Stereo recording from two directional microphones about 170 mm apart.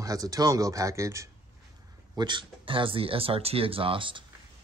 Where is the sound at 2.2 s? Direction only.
25° right (ahead or behind).